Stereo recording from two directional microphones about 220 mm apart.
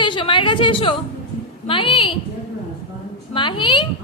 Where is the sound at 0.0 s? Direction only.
20° left (ahead or behind).